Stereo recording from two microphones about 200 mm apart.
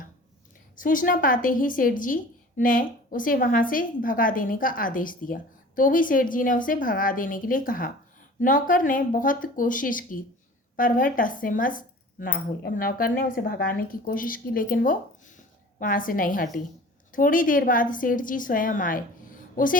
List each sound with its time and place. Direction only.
0.8 s a woman's voice: 45° left (ahead or behind)